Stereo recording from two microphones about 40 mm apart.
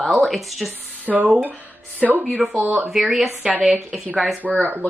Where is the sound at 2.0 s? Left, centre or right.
Centre.